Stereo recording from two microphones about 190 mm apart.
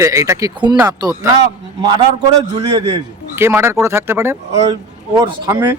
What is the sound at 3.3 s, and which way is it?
A man's voice, 15° right (ahead or behind).